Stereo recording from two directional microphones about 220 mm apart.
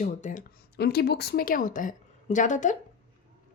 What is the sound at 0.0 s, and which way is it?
A woman's voice, 35° left (ahead or behind).